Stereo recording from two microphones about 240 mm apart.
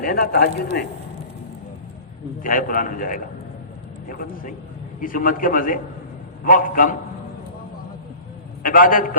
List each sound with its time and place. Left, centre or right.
0.0 s speech: left
2.4 s speech: left
8.6 s speech: left